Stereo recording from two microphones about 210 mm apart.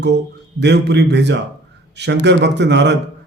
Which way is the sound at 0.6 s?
55° right (ahead or behind).